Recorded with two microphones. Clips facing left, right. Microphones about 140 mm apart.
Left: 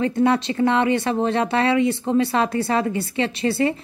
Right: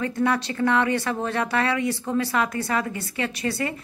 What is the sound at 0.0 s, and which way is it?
Speech, 25° left (ahead or behind).